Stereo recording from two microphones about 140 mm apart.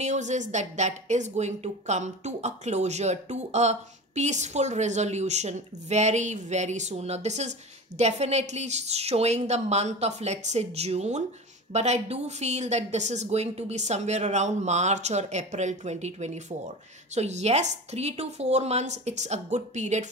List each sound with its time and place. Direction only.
0.0 s speech: 55° right (ahead or behind)